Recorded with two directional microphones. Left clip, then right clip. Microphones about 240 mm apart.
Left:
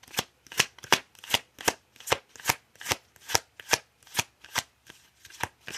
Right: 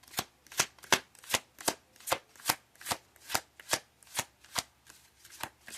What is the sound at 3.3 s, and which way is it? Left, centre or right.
Shuffling cards, centre.